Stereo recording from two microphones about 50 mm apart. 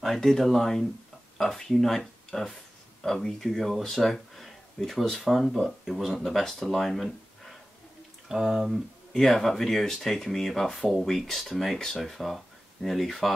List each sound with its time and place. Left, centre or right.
0.0 s speech: centre
8.3 s speech: centre
9.1 s speech: centre